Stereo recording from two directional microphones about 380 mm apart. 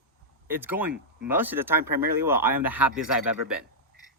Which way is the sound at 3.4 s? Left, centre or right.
Right.